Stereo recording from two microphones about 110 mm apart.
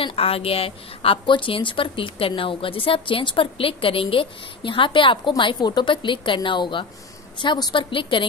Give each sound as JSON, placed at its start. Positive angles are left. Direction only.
{"t": 0.0, "sound": "a woman's voice", "side_deg": 60}